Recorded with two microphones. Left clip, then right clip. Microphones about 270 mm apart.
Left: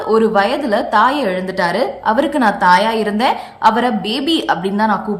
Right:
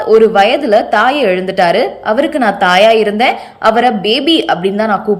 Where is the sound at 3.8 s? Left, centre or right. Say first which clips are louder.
Right 7 dB; left.